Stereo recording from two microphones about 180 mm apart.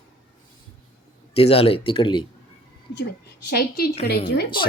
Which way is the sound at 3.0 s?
65° left (ahead or behind).